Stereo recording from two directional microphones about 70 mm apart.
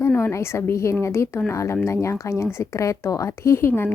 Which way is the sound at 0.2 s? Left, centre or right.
Left.